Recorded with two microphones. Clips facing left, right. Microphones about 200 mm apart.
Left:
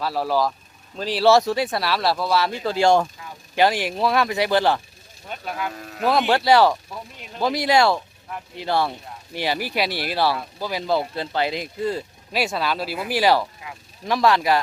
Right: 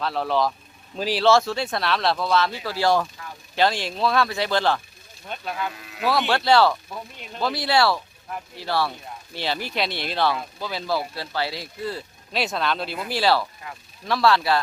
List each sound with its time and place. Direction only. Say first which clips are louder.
0.0 s speech: left 1 dB; 5° left (ahead or behind)
1.2 s speech: left 3 dB; 15° left (ahead or behind)
2.6 s speech: left 7 dB; 20° left (ahead or behind)
3.5 s speech: left 3 dB; 10° left (ahead or behind)
5.7 s speech: left 4 dB; 45° left (ahead or behind)
6.2 s speech: left 2 dB; 10° left (ahead or behind)
6.9 s speech: even; 5° left (ahead or behind)
7.4 s speech: left 3 dB; 15° left (ahead or behind)
12.3 s speech: left 1 dB; 5° left (ahead or behind)